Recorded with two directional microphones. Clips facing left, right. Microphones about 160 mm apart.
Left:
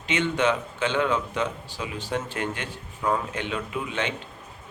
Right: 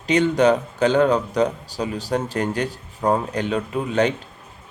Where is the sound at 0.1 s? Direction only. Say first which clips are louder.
Right 7 dB; 40° right (ahead or behind).